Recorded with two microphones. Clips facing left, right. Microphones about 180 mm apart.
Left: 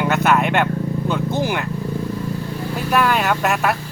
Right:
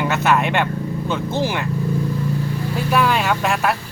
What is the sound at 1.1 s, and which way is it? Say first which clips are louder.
Speech: even; 15° left (ahead or behind).